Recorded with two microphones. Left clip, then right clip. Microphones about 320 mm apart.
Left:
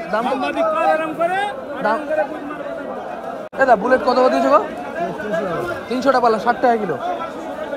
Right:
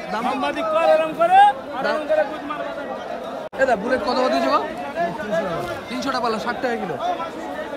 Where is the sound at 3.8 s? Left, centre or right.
Centre.